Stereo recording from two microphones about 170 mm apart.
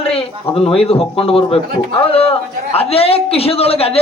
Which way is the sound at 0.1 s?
35° left (ahead or behind).